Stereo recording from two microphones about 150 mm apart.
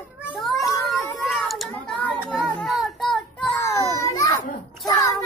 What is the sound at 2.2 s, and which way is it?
Child singing, 5° left (ahead or behind).